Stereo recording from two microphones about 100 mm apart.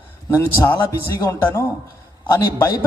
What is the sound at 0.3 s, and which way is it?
A man's voice, 20° left (ahead or behind).